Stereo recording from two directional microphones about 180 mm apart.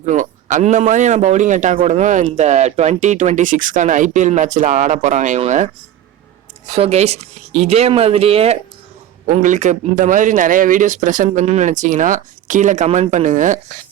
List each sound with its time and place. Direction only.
0.0 s speech: 45° right (ahead or behind)
6.7 s speech: 35° right (ahead or behind)
9.2 s speech: 45° right (ahead or behind)